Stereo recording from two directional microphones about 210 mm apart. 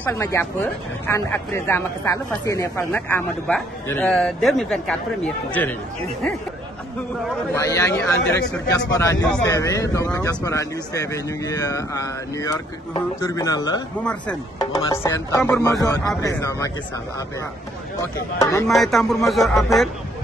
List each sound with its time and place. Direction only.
0.0 s speech: 15° left (ahead or behind)
7.5 s speech: 15° left (ahead or behind)
18.4 s speech: 15° left (ahead or behind)
18.7 s speech: centre (ahead or behind)